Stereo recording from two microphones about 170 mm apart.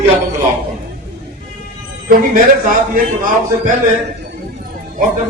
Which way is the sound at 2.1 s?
55° right (ahead or behind).